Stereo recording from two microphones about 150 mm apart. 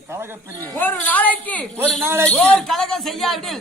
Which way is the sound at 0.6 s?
10° left (ahead or behind).